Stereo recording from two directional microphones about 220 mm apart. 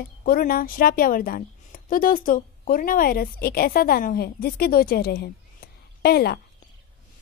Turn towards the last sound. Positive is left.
turn(degrees=45)  # may be behind; listen again after turning